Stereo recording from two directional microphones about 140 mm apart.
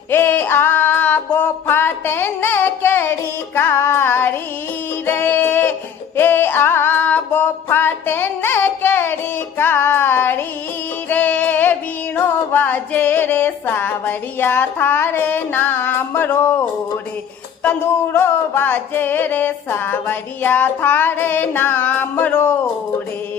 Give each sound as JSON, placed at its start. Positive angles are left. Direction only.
{"t": 0.1, "sound": "a sound", "side_deg": 15}
{"t": 5.0, "sound": "music", "side_deg": 15}
{"t": 9.6, "sound": "child singing", "side_deg": 15}
{"t": 17.6, "sound": "music", "side_deg": 15}